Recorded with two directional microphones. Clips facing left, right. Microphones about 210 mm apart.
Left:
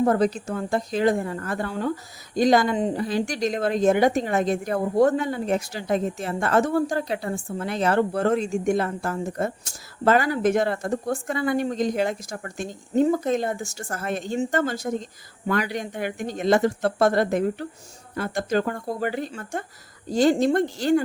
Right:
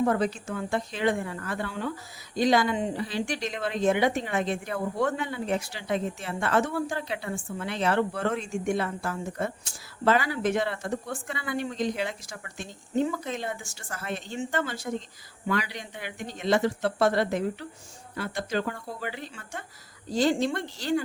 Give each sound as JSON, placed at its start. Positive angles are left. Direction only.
{"t": 0.0, "sound": "a woman's voice", "side_deg": 40}